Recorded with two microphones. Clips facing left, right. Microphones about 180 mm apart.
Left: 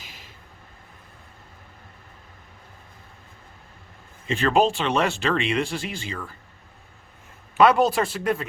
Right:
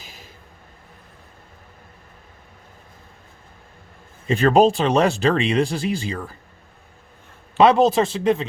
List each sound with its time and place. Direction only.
4.3 s speech: 40° right (ahead or behind)
7.5 s a man's voice: 25° right (ahead or behind)